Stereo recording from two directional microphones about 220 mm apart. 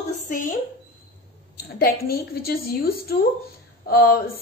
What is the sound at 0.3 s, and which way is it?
Speech, 35° left (ahead or behind).